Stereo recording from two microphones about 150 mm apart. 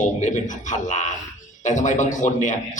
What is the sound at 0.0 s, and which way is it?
A man's voice, 55° left (ahead or behind).